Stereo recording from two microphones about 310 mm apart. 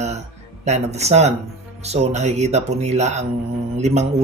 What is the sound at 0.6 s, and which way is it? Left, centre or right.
Speech, right.